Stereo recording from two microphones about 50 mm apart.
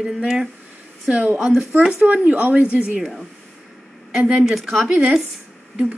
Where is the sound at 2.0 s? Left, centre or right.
Right.